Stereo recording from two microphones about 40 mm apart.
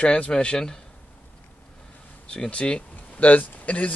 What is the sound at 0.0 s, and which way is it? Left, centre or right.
Speech, left.